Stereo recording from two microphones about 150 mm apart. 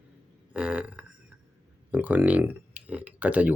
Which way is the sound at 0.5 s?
5° right (ahead or behind).